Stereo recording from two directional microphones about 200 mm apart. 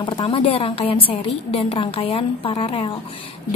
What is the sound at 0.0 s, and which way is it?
A woman's voice, 30° left (ahead or behind).